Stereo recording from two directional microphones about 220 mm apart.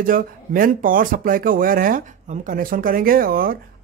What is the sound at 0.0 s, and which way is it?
Speech, 40° right (ahead or behind).